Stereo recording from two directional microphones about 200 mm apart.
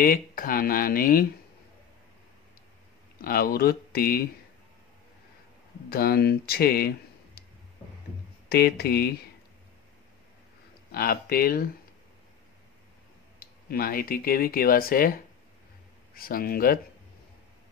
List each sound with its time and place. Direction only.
0.0 s speech: 45° left (ahead or behind)
3.2 s speech: 45° left (ahead or behind)
5.9 s speech: 50° left (ahead or behind)
8.5 s speech: 50° left (ahead or behind)
10.9 s speech: 50° left (ahead or behind)
13.4 s speech: 50° left (ahead or behind)
16.2 s speech: 45° left (ahead or behind)